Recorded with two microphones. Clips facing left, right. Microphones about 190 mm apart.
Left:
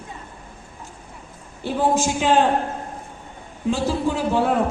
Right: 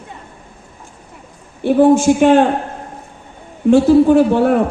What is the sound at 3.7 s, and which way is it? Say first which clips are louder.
Speech: right 13 dB; 55° right (ahead or behind).